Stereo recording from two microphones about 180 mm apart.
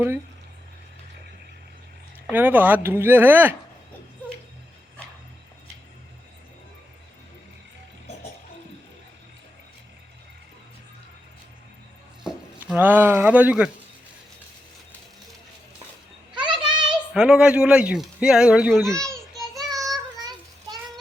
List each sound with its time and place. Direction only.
2.3 s speech: 10° right (ahead or behind)
12.2 s speech: 5° right (ahead or behind)
16.3 s children playing: 25° right (ahead or behind)
16.9 s speech: 5° right (ahead or behind)
19.0 s a sound: centre (ahead or behind)